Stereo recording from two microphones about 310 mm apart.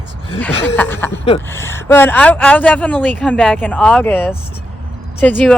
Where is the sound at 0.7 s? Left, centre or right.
Centre.